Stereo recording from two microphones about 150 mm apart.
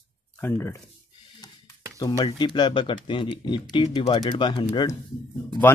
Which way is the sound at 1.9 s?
25° left (ahead or behind).